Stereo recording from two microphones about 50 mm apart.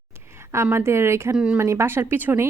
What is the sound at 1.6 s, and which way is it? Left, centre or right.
Speech, right.